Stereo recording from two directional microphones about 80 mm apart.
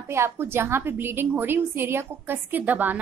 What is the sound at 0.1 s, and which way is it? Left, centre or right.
A woman's voice, right.